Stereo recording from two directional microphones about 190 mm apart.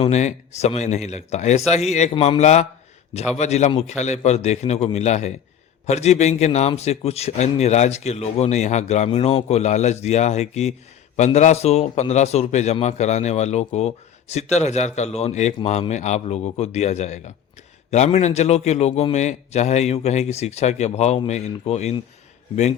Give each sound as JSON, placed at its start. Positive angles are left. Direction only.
{"t": 0.0, "sound": "a man's voice", "side_deg": 35}